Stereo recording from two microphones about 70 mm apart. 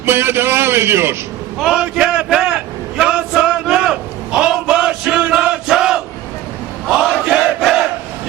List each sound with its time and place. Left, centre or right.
0.0 s a man's voice: right
1.5 s a sound: centre
6.8 s crowd: centre